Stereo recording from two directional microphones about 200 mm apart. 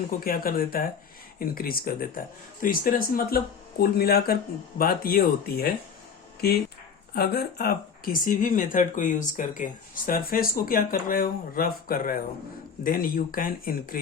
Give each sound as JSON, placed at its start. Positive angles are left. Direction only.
{"t": 0.3, "sound": "speech", "side_deg": 45}